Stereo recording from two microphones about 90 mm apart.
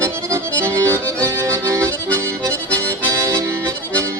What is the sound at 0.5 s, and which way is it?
Accordion, 30° right (ahead or behind).